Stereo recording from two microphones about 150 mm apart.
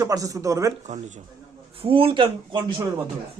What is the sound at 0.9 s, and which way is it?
Speech, 55° right (ahead or behind).